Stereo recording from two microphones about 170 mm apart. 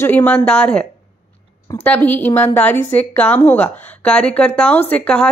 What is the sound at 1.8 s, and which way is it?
Speech, 10° left (ahead or behind).